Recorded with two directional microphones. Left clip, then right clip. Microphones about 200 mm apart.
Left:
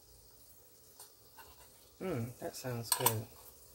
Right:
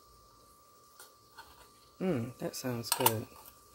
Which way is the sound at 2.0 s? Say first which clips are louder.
Right 5 dB; 35° right (ahead or behind).